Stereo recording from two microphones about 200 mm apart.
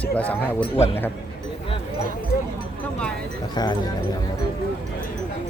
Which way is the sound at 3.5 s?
20° left (ahead or behind).